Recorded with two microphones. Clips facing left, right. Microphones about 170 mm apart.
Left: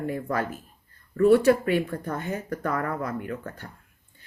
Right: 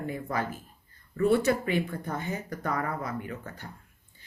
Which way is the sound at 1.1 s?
60° left (ahead or behind).